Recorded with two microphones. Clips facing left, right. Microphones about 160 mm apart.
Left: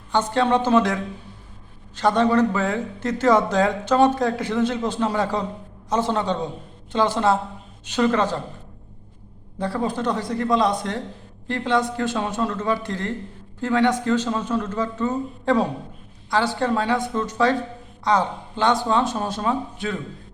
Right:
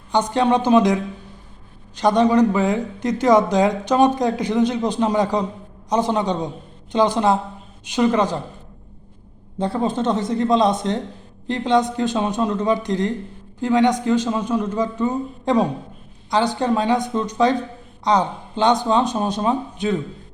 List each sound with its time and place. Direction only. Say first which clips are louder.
0.1 s a man's voice: right 2 dB; 15° right (ahead or behind)
2.0 s a man's voice: right 3 dB; 15° right (ahead or behind)
9.6 s a man's voice: right 3 dB; 20° right (ahead or behind)